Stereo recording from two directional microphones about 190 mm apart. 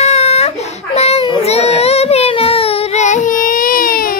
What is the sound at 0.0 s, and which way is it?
Baby cry, 35° left (ahead or behind).